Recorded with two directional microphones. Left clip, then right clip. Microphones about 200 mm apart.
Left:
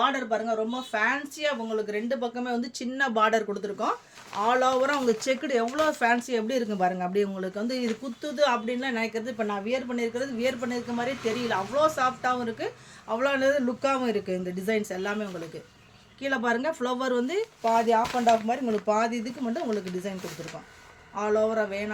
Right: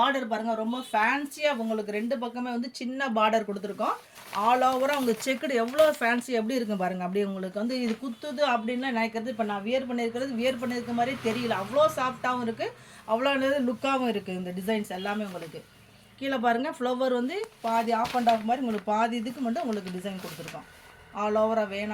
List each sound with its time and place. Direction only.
0.0 s a woman's voice: 20° left (ahead or behind)
21.2 s speech: 25° left (ahead or behind)